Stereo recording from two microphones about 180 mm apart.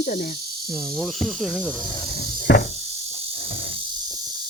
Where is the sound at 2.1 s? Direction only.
65° left (ahead or behind).